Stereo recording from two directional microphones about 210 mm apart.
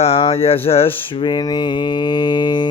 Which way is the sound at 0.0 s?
25° left (ahead or behind).